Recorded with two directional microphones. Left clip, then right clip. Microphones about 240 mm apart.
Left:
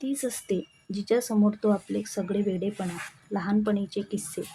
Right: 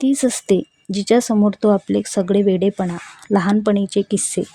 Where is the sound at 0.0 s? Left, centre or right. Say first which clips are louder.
Right 13 dB; right.